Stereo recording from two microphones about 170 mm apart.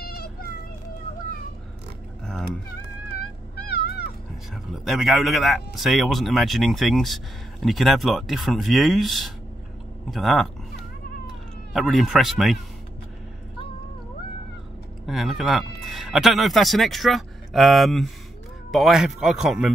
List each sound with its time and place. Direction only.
0.0 s children playing: 65° left (ahead or behind)
3.2 s cat: 65° left (ahead or behind)
4.7 s speech: centre (ahead or behind)
15.0 s speech: centre (ahead or behind)